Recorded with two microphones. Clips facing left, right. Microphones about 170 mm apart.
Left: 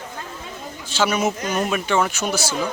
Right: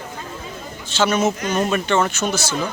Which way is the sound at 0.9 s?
10° left (ahead or behind).